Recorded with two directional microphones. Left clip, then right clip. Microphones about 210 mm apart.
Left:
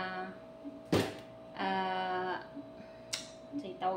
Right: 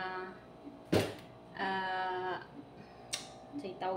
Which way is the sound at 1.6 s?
30° left (ahead or behind).